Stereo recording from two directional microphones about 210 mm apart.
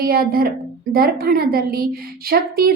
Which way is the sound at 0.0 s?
45° right (ahead or behind).